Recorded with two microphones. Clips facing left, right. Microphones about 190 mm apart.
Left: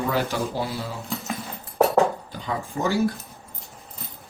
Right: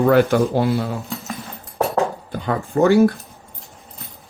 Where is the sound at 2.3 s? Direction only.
55° right (ahead or behind).